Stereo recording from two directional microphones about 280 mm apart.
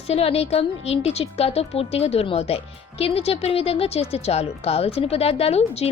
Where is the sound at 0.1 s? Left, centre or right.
Left.